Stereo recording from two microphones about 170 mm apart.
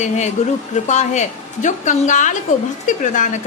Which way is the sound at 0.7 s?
45° left (ahead or behind).